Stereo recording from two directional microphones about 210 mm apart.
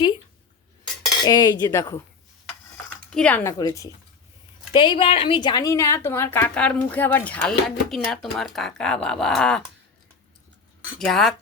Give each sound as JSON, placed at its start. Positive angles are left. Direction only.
{"t": 1.2, "sound": "speech", "side_deg": 20}
{"t": 3.1, "sound": "a woman's voice", "side_deg": 5}
{"t": 11.0, "sound": "speech", "side_deg": 0}